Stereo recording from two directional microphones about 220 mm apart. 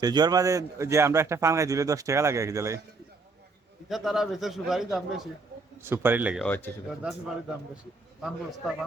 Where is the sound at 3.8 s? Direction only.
Centre (ahead or behind).